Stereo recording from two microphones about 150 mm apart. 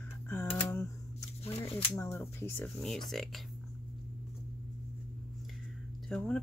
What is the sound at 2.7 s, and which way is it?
Speech, centre (ahead or behind).